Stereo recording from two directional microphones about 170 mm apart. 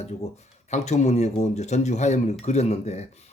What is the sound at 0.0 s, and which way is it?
Speech, 40° left (ahead or behind).